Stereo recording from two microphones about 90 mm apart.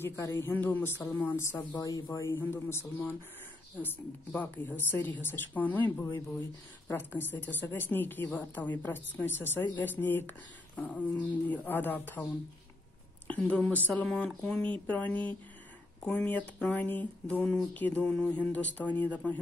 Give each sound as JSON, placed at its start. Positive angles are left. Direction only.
{"t": 0.0, "sound": "a woman's voice", "side_deg": 25}
{"t": 1.8, "sound": "a woman's voice", "side_deg": 40}
{"t": 6.9, "sound": "a woman's voice", "side_deg": 25}
{"t": 13.3, "sound": "speech", "side_deg": 15}